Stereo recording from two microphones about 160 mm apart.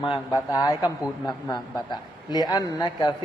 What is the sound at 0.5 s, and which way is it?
Speech, 20° left (ahead or behind).